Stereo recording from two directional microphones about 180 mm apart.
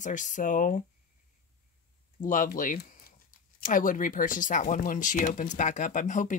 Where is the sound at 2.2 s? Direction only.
50° left (ahead or behind).